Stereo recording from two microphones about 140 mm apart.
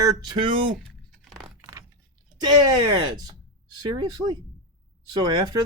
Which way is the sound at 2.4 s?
30° right (ahead or behind).